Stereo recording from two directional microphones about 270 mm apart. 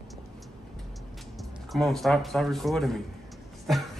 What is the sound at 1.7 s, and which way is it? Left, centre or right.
A woman's voice, centre.